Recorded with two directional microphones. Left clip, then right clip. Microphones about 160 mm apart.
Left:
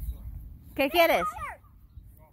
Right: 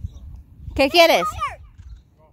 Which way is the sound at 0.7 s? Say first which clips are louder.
Right 9 dB; 60° right (ahead or behind).